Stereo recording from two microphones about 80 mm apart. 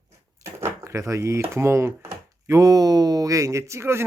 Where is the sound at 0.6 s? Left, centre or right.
Right.